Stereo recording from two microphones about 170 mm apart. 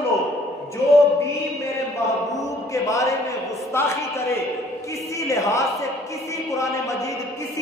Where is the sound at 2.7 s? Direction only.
20° left (ahead or behind).